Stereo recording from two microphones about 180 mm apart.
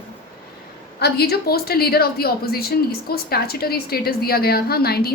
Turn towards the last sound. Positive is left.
turn(degrees=60)  # may be behind; listen again after turning